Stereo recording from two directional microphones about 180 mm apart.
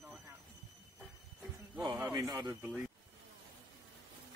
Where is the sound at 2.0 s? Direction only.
20° right (ahead or behind).